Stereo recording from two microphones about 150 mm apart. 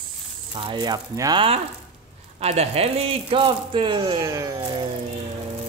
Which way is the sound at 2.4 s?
45° right (ahead or behind).